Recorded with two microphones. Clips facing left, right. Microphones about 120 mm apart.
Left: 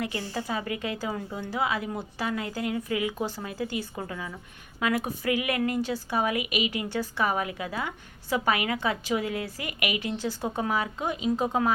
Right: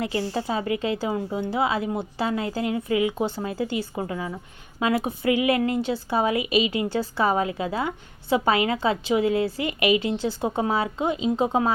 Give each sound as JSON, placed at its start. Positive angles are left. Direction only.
{"t": 0.0, "sound": "a woman's voice", "side_deg": -25}